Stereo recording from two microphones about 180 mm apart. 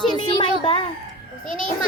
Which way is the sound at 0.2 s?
25° left (ahead or behind).